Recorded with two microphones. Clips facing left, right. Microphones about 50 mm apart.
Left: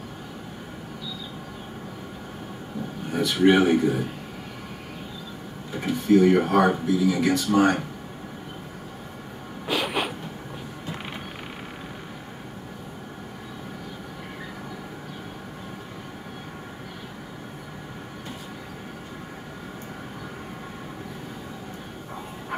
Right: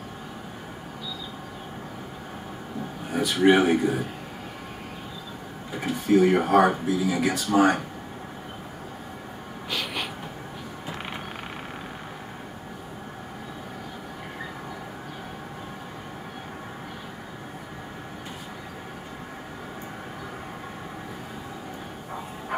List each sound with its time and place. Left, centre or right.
3.1 s speech: centre
5.7 s speech: centre
9.7 s vehicle: centre